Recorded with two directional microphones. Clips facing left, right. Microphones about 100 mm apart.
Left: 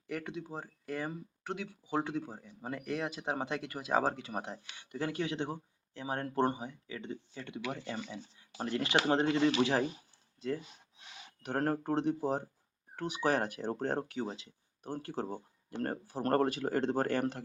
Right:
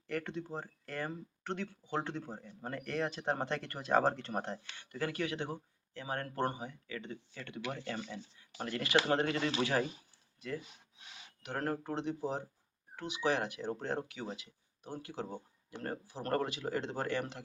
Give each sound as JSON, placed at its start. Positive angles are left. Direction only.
{"t": 0.1, "sound": "speech", "side_deg": 5}
{"t": 11.4, "sound": "speech", "side_deg": 40}